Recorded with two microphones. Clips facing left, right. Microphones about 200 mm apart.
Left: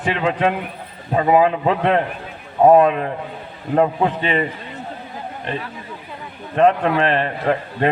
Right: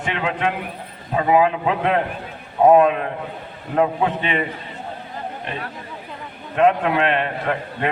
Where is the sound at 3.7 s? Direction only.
35° left (ahead or behind).